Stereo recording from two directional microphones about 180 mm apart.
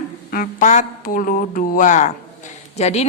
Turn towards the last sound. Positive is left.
turn(degrees=35)  # may be behind; listen again after turning